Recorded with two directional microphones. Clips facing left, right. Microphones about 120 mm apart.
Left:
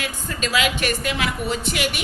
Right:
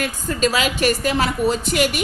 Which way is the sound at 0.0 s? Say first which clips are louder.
Right 7 dB; 40° right (ahead or behind).